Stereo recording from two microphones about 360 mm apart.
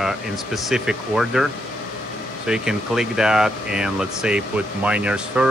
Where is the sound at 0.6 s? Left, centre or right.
Centre.